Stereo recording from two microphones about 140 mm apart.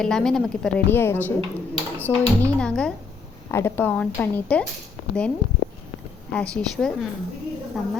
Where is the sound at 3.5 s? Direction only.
20° left (ahead or behind).